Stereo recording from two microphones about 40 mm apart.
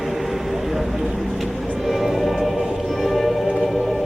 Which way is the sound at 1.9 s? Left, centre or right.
Centre.